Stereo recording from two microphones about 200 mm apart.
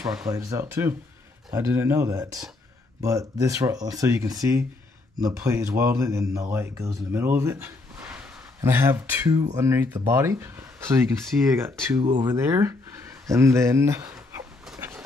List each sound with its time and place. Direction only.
0.3 s speech: 15° right (ahead or behind)
14.6 s dog: 5° right (ahead or behind)